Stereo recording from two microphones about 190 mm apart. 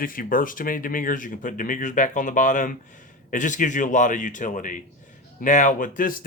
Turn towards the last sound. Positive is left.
turn(degrees=45)  # may be behind; listen again after turning